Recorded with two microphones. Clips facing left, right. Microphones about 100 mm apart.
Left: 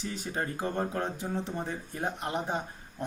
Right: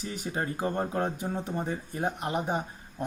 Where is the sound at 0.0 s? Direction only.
15° right (ahead or behind).